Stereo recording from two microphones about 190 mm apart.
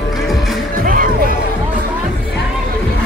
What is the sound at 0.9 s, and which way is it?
Music, 45° right (ahead or behind).